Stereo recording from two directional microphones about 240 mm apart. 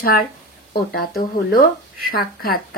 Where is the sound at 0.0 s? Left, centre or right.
Left.